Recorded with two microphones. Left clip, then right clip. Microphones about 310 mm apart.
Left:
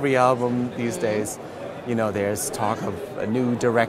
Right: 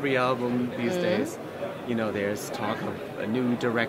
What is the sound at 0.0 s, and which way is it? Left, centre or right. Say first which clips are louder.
Speech: left 6 dB; left.